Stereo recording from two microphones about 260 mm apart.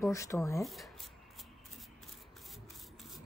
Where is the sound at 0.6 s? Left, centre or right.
Centre.